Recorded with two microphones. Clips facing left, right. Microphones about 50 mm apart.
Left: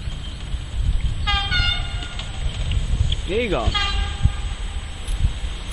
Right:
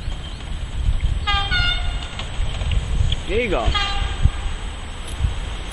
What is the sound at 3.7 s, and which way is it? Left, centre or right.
Vehicle, centre.